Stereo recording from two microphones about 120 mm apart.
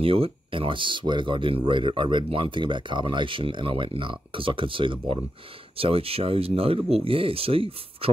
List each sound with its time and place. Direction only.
0.0 s speech: 50° right (ahead or behind)